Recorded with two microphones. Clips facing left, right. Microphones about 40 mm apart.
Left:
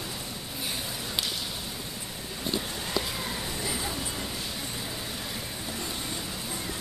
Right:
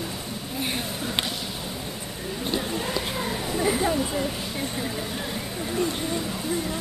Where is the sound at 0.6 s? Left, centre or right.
Right.